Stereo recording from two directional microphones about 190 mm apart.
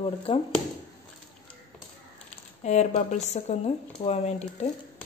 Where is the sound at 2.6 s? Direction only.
35° left (ahead or behind).